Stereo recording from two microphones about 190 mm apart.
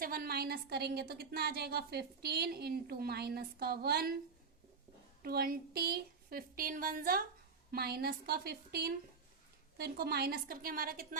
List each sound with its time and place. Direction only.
0.0 s a woman's voice: 50° right (ahead or behind)
5.2 s a woman's voice: 50° right (ahead or behind)